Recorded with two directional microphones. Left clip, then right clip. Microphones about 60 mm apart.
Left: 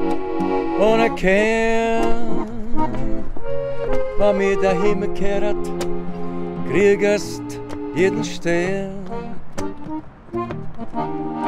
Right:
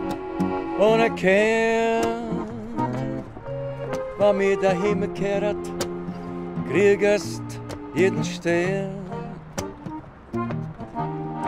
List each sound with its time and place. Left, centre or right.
0.0 s music: left
0.7 s music: left
11.0 s music: left